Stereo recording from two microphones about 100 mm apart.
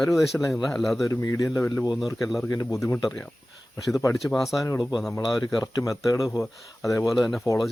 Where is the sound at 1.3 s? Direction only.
30° left (ahead or behind).